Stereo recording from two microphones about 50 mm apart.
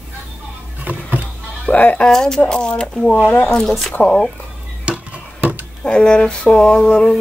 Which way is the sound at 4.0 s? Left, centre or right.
Left.